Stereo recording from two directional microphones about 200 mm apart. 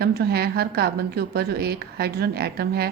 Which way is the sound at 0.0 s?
50° right (ahead or behind).